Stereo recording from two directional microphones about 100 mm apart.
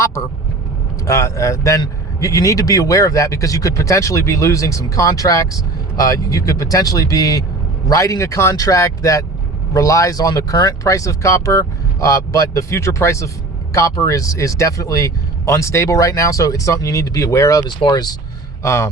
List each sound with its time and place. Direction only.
1.0 s speech: 30° left (ahead or behind)
17.7 s speech: 45° left (ahead or behind)
18.6 s speech: 30° left (ahead or behind)